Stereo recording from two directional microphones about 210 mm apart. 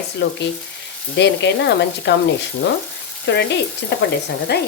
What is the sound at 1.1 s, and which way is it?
Speech, 55° left (ahead or behind).